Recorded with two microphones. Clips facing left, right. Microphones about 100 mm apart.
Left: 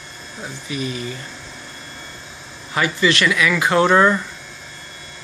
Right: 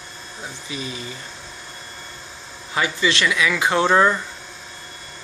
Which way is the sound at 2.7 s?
20° right (ahead or behind).